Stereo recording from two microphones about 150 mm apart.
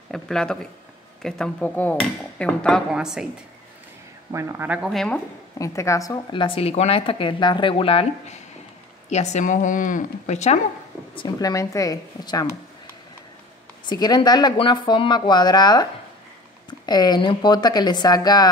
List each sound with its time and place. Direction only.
0.1 s speech: 5° left (ahead or behind)
2.9 s speech: 5° right (ahead or behind)
4.3 s speech: 20° right (ahead or behind)
4.8 s speech: 5° left (ahead or behind)
5.6 s speech: 20° left (ahead or behind)
6.3 s speech: 35° left (ahead or behind)
11.1 s speech: 30° left (ahead or behind)
13.8 s speech: 30° left (ahead or behind)